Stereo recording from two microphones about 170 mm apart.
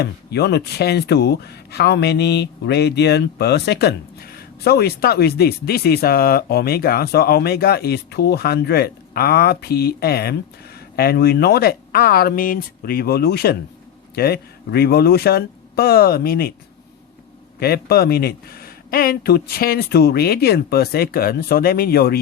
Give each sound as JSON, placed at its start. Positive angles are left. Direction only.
{"t": 0.0, "sound": "speech", "side_deg": 75}
{"t": 17.6, "sound": "speech", "side_deg": 65}